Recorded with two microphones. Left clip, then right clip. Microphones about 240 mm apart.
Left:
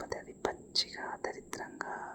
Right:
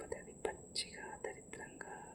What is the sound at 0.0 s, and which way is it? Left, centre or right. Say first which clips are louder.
Whispering: left 6 dB; left.